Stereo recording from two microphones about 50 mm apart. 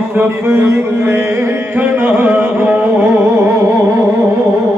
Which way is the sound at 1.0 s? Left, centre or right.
Right.